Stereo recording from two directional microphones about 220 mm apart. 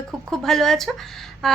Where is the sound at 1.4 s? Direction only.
Centre (ahead or behind).